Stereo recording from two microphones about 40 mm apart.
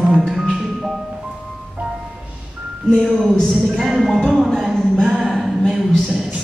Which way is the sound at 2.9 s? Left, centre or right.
Centre.